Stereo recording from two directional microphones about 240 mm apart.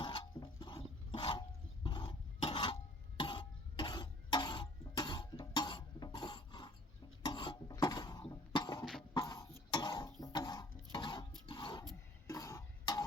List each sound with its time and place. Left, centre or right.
0.0 s a sound: centre
3.2 s cough: left
8.8 s cough: centre
9.1 s cough: centre
11.4 s a sound: centre
12.3 s cough: centre